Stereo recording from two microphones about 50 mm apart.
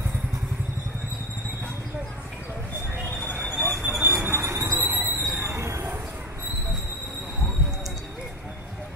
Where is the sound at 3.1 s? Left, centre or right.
Left.